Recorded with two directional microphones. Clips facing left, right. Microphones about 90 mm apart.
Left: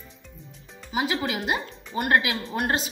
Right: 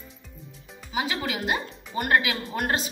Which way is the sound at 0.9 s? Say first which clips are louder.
Left 2 dB; 5° left (ahead or behind).